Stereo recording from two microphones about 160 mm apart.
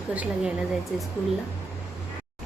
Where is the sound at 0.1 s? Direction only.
10° right (ahead or behind).